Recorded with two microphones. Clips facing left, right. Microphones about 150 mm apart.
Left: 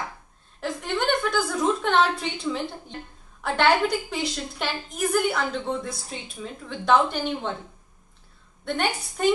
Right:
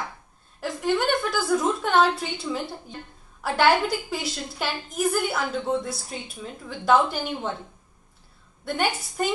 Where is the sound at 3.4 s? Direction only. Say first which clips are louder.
Even; 5° right (ahead or behind).